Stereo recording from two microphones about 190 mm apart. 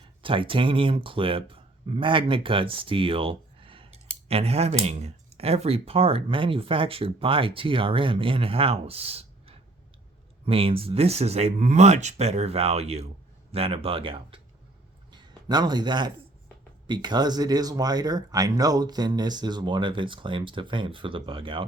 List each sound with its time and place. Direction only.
0.2 s speech: 25° right (ahead or behind)